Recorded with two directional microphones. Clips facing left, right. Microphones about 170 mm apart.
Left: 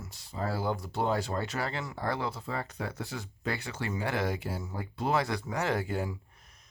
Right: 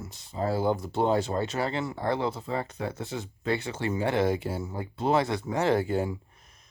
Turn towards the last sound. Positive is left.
turn(degrees=-25)  # may be behind; listen again after turning